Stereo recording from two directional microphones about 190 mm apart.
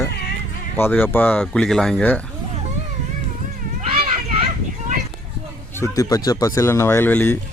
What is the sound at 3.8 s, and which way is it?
Children playing, 30° right (ahead or behind).